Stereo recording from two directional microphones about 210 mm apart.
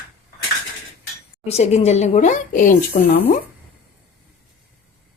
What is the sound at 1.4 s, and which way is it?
Speech, 30° left (ahead or behind).